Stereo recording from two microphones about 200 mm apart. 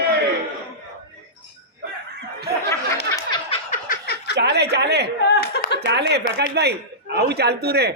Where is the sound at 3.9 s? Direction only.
50° left (ahead or behind).